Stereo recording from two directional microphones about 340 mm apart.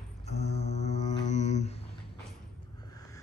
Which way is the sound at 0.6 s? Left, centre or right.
Centre.